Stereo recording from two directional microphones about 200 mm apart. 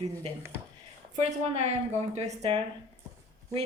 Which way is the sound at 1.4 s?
30° right (ahead or behind).